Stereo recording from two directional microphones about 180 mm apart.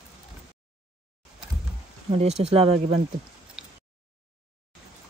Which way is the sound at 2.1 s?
35° right (ahead or behind).